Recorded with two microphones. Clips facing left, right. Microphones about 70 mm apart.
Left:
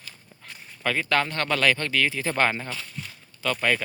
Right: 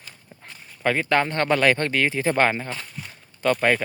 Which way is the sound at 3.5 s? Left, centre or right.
Centre.